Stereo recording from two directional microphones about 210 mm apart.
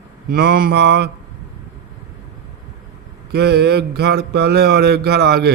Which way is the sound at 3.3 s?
50° right (ahead or behind).